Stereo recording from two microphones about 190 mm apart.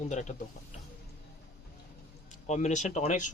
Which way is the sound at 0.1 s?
40° left (ahead or behind).